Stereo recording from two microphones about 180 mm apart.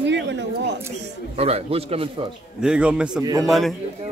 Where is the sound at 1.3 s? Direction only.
35° right (ahead or behind).